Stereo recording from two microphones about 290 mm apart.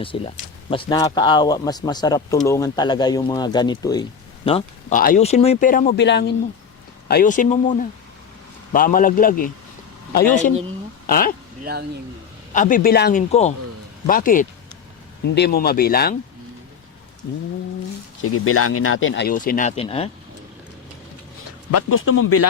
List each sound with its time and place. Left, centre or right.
0.1 s speech: centre
11.0 s speech: left
11.6 s speech: right
12.5 s speech: left
18.2 s speech: left; by 20.1 s centre
21.7 s speech: left